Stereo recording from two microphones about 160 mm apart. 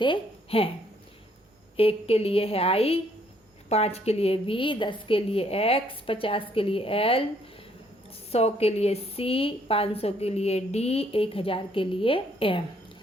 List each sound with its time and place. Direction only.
0.0 s a woman's voice: 35° left (ahead or behind)
1.7 s a woman's voice: 35° left (ahead or behind)
8.3 s a woman's voice: 40° left (ahead or behind)